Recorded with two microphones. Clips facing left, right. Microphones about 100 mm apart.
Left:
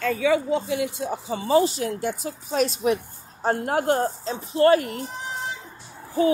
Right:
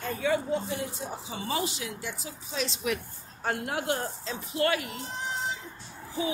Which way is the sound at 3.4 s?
40° left (ahead or behind).